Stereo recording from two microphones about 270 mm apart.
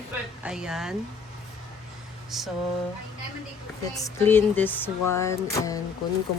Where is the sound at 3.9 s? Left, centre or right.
Centre.